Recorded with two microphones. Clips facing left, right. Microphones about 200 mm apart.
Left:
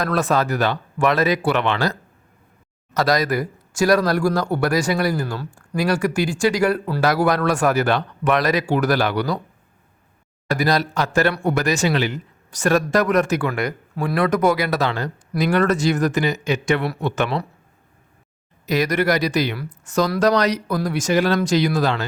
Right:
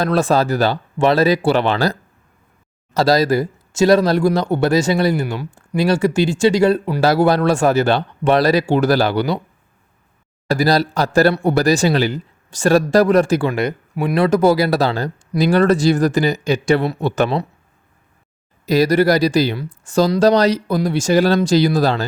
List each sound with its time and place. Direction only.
0.0 s speech: 30° right (ahead or behind)
10.5 s speech: 30° right (ahead or behind)
18.6 s speech: 30° right (ahead or behind)